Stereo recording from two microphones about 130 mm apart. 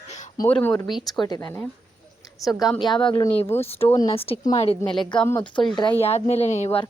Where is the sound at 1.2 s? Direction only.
30° left (ahead or behind).